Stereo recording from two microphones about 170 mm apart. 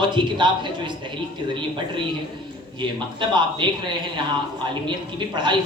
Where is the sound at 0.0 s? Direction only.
25° right (ahead or behind).